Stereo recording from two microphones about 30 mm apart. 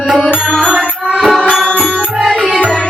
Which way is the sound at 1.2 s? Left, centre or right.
Centre.